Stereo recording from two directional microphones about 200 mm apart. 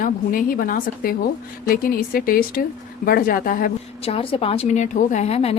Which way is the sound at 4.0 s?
30° left (ahead or behind).